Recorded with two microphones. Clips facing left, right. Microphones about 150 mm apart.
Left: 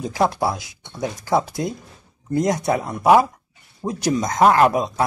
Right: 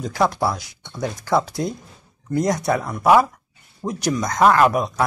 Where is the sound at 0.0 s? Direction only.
20° left (ahead or behind).